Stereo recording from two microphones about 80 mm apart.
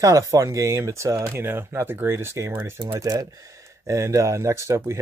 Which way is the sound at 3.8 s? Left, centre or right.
Right.